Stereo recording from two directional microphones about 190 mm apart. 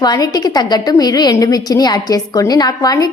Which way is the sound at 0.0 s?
20° left (ahead or behind).